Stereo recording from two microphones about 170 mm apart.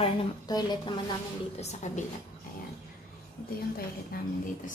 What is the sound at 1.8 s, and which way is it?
Speech, 45° left (ahead or behind).